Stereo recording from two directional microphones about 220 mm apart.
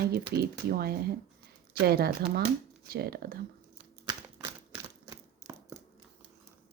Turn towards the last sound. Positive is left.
turn(degrees=-15)  # may be behind; listen again after turning